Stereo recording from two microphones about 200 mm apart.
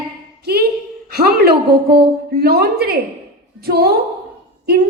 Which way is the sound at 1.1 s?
50° right (ahead or behind).